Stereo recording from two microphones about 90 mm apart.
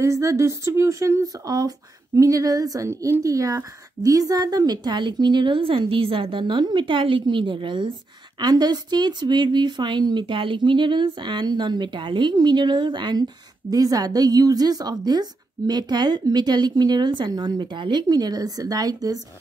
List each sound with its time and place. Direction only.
0.0 s a woman's voice: 35° right (ahead or behind); by 7.9 s 65° right (ahead or behind)
8.4 s a woman's voice: 50° right (ahead or behind)
13.7 s a woman's voice: 45° right (ahead or behind); by 18.0 s 60° right (ahead or behind)
18.0 s a woman's voice: 45° right (ahead or behind)